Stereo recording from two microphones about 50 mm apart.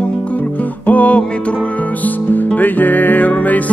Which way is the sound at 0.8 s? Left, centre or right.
Left.